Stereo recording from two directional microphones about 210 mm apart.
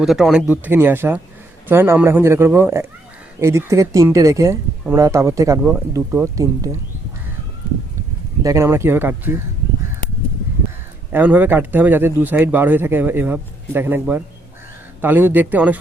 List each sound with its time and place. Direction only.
0.0 s speech: centre (ahead or behind)
7.6 s run: 15° left (ahead or behind)
8.4 s speech: 15° right (ahead or behind)
11.1 s speech: 10° right (ahead or behind)